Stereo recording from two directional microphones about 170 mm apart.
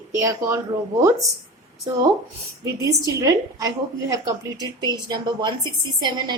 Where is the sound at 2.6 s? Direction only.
20° right (ahead or behind).